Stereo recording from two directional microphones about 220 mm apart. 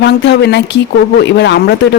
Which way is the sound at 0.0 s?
50° left (ahead or behind).